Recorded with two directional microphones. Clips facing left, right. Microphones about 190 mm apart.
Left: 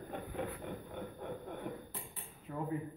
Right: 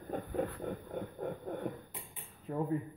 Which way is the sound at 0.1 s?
40° right (ahead or behind).